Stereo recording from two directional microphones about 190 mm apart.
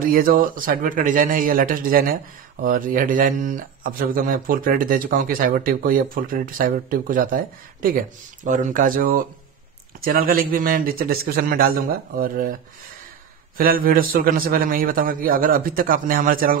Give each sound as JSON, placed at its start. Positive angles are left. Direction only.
{"t": 0.0, "sound": "speech", "side_deg": -50}
{"t": 13.6, "sound": "speech", "side_deg": -50}